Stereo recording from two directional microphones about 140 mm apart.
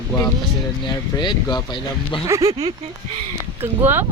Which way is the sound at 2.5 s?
45° right (ahead or behind).